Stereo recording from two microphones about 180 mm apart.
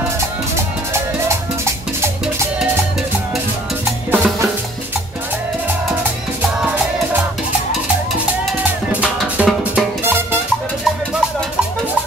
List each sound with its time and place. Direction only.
0.9 s music: 15° right (ahead or behind)
4.1 s music: 10° right (ahead or behind)
9.0 s music: 5° right (ahead or behind)